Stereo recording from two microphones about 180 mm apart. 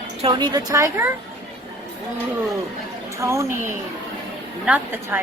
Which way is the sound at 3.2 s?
15° right (ahead or behind).